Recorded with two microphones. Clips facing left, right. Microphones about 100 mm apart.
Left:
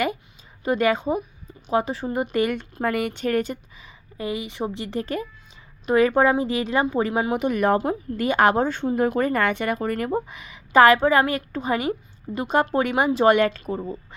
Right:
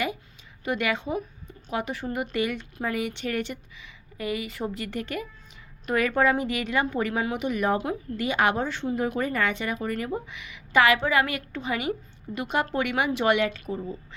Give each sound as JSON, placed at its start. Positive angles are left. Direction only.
{"t": 0.6, "sound": "speech", "side_deg": 35}
{"t": 2.3, "sound": "speech", "side_deg": 50}
{"t": 4.3, "sound": "a woman's voice", "side_deg": 25}
{"t": 7.3, "sound": "a woman's voice", "side_deg": 50}
{"t": 12.3, "sound": "a woman's voice", "side_deg": 30}